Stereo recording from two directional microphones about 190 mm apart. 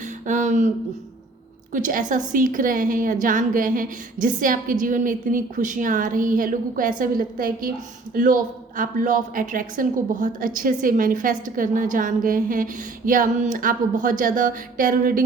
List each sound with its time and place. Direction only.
0.3 s speech: 40° right (ahead or behind)
1.7 s a woman's voice: 45° right (ahead or behind)